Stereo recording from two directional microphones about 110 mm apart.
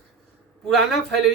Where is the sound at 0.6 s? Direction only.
Centre (ahead or behind).